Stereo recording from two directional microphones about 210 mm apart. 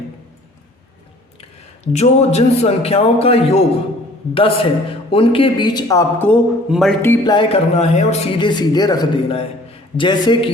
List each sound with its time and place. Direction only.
1.4 s a man's voice: 30° left (ahead or behind); by 6.3 s 10° left (ahead or behind)
6.7 s speech: centre (ahead or behind)
7.0 s speech: 10° left (ahead or behind)
7.3 s a man's voice: 30° left (ahead or behind)